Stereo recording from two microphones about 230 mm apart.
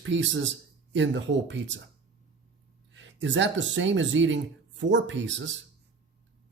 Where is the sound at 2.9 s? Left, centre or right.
Right.